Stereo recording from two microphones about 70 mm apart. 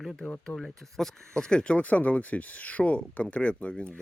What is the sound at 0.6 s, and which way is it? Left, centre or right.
Speech, centre.